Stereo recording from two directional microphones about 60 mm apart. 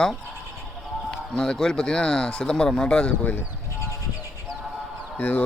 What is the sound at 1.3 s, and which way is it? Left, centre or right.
Speech, centre.